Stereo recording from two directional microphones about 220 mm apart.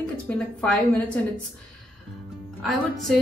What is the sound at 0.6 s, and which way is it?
Speech, 5° left (ahead or behind).